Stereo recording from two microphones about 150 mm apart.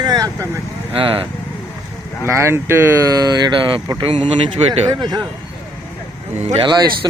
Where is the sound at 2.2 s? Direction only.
15° right (ahead or behind).